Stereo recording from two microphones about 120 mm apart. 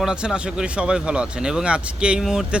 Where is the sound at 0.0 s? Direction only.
5° right (ahead or behind).